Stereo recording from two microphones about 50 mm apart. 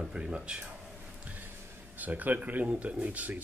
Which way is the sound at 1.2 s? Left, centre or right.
Right.